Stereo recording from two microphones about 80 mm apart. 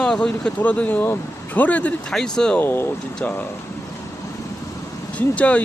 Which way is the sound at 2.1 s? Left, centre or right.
Centre.